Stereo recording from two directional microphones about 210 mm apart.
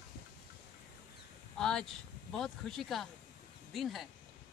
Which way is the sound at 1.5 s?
5° left (ahead or behind).